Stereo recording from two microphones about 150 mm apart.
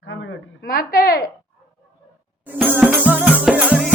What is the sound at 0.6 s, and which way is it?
Speech, 75° left (ahead or behind).